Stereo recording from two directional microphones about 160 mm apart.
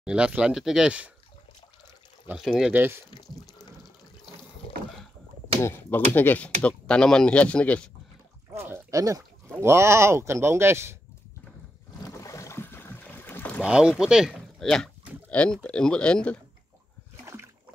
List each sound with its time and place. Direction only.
0.0 s speech: 5° right (ahead or behind)
2.2 s speech: 5° right (ahead or behind)
2.7 s speech: 15° right (ahead or behind)
3.1 s speech: 25° left (ahead or behind)
5.6 s speech: 15° left (ahead or behind)
8.5 s speech: 15° right (ahead or behind)
12.0 s boat: 20° left (ahead or behind)
13.6 s speech: 5° right (ahead or behind)